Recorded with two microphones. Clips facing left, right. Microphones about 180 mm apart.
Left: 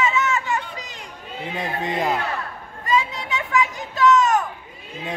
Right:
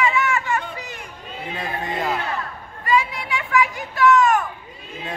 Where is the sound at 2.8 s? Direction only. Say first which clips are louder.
Right 1 dB; 20° left (ahead or behind).